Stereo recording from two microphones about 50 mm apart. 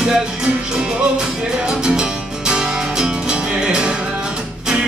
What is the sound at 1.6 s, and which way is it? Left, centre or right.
Music, centre.